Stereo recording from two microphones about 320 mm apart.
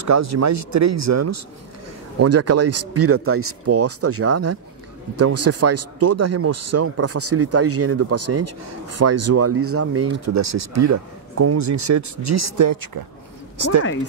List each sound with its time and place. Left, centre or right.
0.0 s speech: right
13.6 s a woman's voice: right